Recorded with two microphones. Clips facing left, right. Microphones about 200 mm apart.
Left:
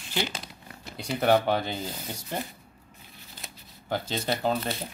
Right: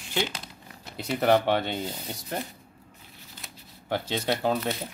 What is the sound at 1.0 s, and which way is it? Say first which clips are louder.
Speech: right 1 dB; centre (ahead or behind).